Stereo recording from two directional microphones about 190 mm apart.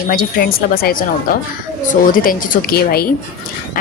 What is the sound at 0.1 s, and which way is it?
A woman's voice, 50° left (ahead or behind).